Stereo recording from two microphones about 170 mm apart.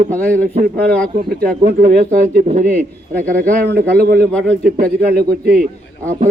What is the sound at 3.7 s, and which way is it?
Speech, 65° right (ahead or behind).